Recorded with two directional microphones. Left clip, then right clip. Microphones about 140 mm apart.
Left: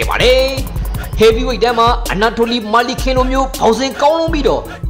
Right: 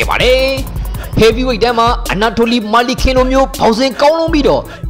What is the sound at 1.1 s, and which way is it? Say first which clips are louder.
Speech: right 1 dB; 30° right (ahead or behind).